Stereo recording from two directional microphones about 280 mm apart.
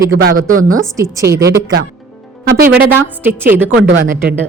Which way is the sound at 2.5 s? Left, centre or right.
Right.